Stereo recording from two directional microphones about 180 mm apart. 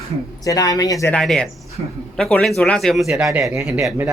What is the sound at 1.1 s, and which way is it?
A man's voice, 5° left (ahead or behind).